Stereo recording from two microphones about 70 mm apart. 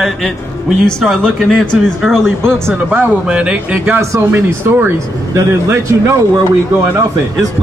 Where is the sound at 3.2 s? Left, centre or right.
Centre.